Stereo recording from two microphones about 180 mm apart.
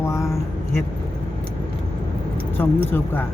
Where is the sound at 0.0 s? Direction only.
15° left (ahead or behind).